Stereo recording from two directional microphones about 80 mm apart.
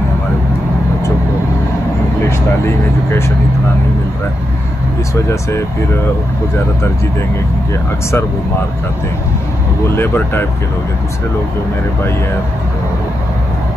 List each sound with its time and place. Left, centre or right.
3.1 s speech: left
9.9 s speech: left